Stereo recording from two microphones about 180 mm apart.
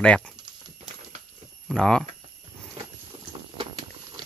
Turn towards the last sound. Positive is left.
turn(degrees=-30)  # may be behind; listen again after turning